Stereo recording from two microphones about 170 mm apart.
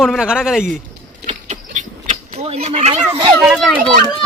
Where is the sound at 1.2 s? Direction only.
45° right (ahead or behind).